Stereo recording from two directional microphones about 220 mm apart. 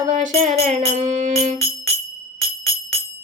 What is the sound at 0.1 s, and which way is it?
Music, 35° right (ahead or behind).